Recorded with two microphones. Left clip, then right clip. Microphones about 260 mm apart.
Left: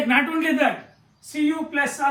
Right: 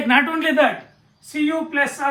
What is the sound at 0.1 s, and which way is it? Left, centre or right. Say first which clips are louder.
Speech: right 5 dB; centre.